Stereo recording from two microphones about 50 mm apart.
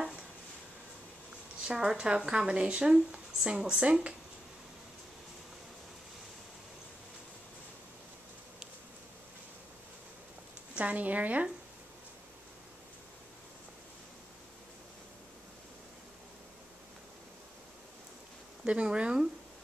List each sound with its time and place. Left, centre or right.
1.7 s speech: centre
10.7 s speech: right
18.7 s speech: right